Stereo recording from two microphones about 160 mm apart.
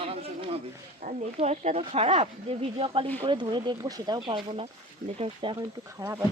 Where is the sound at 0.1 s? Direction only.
35° right (ahead or behind).